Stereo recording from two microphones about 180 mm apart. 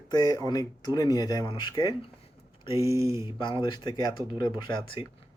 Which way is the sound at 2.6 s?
15° right (ahead or behind).